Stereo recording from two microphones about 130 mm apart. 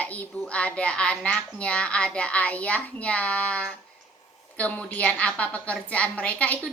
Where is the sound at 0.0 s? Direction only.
10° left (ahead or behind).